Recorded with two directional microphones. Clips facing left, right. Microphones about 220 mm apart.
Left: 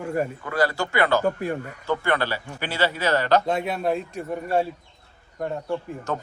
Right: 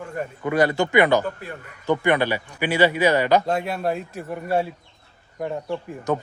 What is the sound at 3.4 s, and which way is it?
A man's voice, centre (ahead or behind).